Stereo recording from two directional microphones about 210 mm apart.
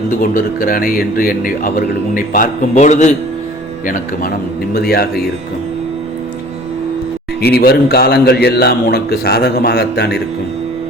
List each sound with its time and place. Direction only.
0.2 s a man's voice: 40° left (ahead or behind)
7.4 s a man's voice: 50° left (ahead or behind)